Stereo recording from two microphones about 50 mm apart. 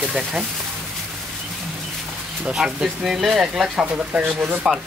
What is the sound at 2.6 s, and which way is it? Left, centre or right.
Speech, centre.